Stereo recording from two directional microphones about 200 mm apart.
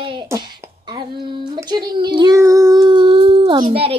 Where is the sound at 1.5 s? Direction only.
20° right (ahead or behind).